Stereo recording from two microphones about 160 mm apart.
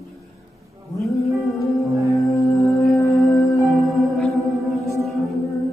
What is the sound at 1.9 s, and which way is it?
Music, 20° right (ahead or behind).